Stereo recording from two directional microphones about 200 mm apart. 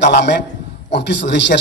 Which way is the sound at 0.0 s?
60° left (ahead or behind).